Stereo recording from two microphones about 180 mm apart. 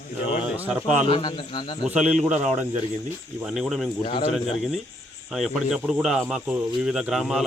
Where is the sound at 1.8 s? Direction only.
5° right (ahead or behind).